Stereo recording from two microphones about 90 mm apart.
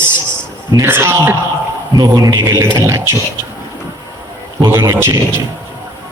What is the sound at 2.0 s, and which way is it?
A man's voice, 40° right (ahead or behind).